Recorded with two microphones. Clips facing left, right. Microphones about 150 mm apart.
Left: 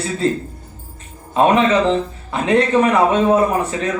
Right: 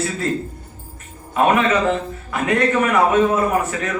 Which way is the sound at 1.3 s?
25° left (ahead or behind).